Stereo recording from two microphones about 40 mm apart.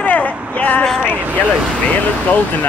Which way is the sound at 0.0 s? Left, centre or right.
Left.